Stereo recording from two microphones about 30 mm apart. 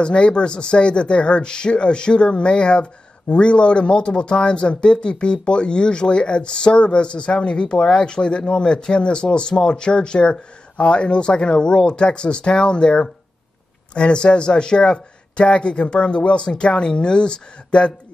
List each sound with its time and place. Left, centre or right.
0.0 s speech: left